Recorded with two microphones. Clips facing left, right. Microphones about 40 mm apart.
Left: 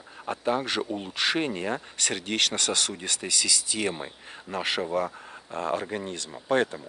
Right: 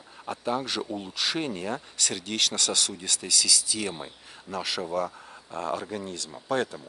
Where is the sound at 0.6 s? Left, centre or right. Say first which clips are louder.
Left 2 dB; left.